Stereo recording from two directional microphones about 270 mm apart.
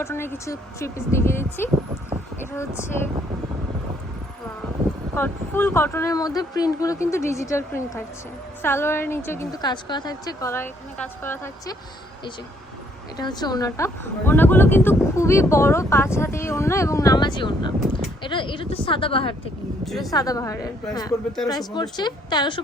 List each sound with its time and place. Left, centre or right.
0.0 s a woman's voice: centre
5.1 s a woman's voice: centre
13.1 s a woman's voice: centre
19.8 s speech: centre
20.1 s a woman's voice: centre